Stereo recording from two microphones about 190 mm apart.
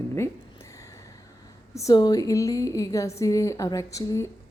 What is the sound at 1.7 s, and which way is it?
Speech, 20° left (ahead or behind).